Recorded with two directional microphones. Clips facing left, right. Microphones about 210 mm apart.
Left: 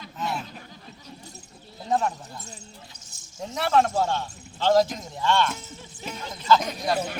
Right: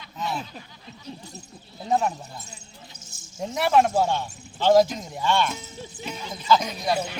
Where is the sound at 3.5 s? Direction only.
15° right (ahead or behind).